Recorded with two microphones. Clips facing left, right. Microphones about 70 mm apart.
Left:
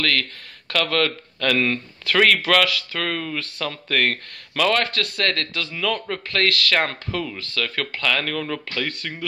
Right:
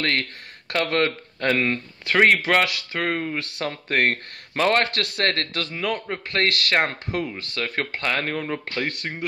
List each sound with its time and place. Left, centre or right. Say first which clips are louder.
0.0 s speech: left 1 dB; right
6.0 s speech: left 1 dB; right